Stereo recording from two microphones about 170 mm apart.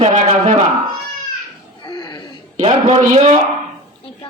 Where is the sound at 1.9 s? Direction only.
30° left (ahead or behind).